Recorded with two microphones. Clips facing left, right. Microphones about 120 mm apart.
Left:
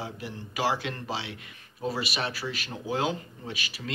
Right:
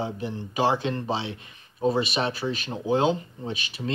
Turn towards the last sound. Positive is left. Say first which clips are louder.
# right 5 dB
turn(degrees=-25)  # may be behind; listen again after turning